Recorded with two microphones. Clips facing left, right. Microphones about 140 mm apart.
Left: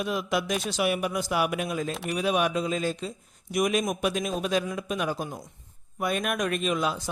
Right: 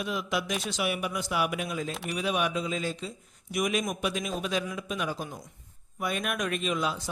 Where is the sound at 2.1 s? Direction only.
45° left (ahead or behind).